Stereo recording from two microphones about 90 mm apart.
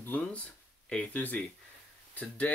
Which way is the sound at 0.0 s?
20° left (ahead or behind).